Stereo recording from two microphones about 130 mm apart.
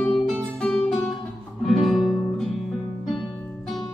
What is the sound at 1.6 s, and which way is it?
Music, centre (ahead or behind).